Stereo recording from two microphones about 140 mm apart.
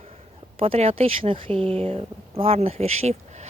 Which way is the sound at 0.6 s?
45° right (ahead or behind).